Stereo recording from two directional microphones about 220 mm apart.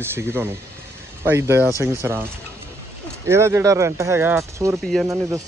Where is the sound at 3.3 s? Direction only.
10° right (ahead or behind).